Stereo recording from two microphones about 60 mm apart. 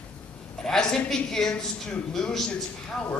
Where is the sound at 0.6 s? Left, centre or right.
Centre.